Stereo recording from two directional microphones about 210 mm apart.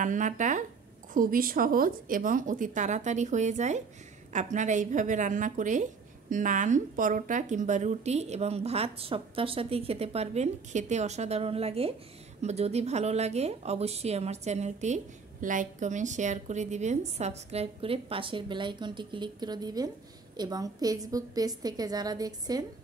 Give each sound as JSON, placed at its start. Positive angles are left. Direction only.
{"t": 0.0, "sound": "a woman's voice", "side_deg": -35}